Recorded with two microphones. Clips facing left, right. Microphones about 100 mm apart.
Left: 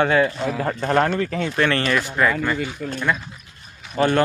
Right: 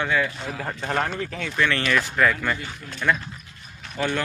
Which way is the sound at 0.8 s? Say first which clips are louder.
Left 6 dB; 40° left (ahead or behind).